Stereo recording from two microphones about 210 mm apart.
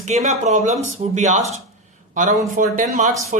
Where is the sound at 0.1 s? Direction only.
35° right (ahead or behind).